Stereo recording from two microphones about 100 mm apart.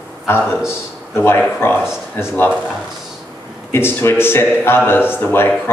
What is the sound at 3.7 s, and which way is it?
Speech, 25° left (ahead or behind).